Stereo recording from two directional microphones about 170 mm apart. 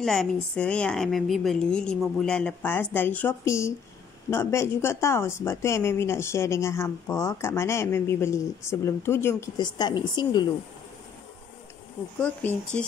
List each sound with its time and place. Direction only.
0.0 s a woman's voice: centre (ahead or behind); by 10.5 s 25° left (ahead or behind)
12.2 s a woman's voice: 5° left (ahead or behind)